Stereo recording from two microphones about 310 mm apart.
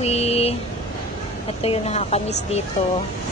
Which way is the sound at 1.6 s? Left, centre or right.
Centre.